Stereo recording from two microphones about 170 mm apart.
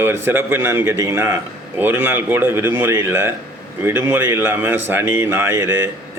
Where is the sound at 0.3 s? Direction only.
15° right (ahead or behind).